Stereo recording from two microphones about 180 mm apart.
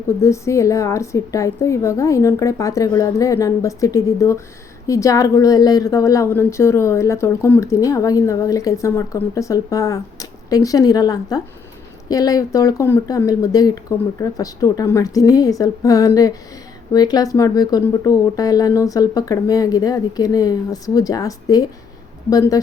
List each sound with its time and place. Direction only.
0.2 s a woman's voice: 15° left (ahead or behind)